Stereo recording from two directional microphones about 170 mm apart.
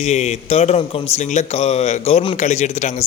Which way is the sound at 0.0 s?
40° left (ahead or behind).